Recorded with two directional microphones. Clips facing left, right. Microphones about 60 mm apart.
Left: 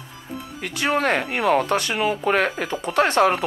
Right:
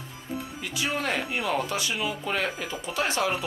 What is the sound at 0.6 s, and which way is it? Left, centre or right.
Speech, left.